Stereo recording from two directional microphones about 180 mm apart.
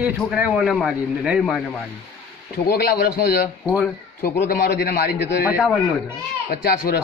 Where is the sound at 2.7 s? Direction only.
60° left (ahead or behind).